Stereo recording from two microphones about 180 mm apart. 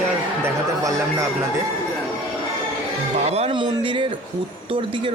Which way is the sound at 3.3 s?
35° right (ahead or behind).